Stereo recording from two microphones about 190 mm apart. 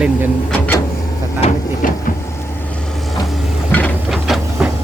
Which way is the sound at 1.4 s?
40° left (ahead or behind).